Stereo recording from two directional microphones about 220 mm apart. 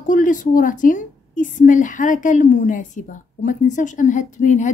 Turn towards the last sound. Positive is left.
turn(degrees=35)  # may be behind; listen again after turning